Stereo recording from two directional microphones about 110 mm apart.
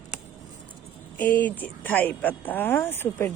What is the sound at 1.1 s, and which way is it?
Speech, 15° left (ahead or behind).